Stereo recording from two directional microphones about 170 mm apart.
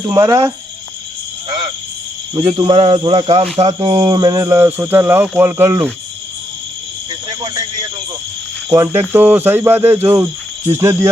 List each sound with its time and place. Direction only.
0.0 s speech: 15° right (ahead or behind)
2.3 s speech: 25° right (ahead or behind)
7.4 s a sound: 20° right (ahead or behind)
8.7 s speech: 15° right (ahead or behind)